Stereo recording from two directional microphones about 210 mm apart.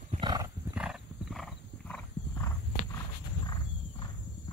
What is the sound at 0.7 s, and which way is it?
Horse, 5° right (ahead or behind).